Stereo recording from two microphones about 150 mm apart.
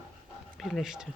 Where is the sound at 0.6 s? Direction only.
Centre (ahead or behind).